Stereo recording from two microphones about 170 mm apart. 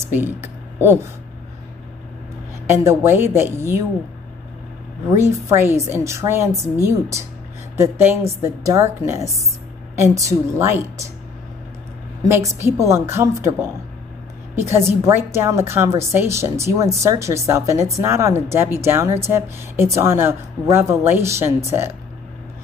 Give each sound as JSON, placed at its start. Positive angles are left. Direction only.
{"t": 0.1, "sound": "speech", "side_deg": -10}
{"t": 2.6, "sound": "a woman's voice", "side_deg": -15}
{"t": 5.1, "sound": "a woman's voice", "side_deg": -15}
{"t": 12.3, "sound": "a woman's voice", "side_deg": -15}